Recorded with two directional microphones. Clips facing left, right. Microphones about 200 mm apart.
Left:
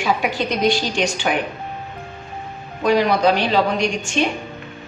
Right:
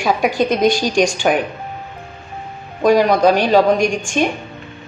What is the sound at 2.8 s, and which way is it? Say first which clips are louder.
A woman's voice: right 4 dB; 45° right (ahead or behind).